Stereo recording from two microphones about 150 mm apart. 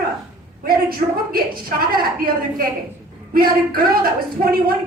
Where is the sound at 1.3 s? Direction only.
75° right (ahead or behind).